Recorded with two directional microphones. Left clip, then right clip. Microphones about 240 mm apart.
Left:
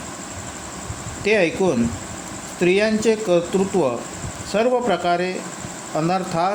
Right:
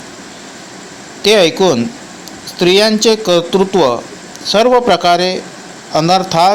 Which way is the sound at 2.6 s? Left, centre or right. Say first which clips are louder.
Right 8 dB; right.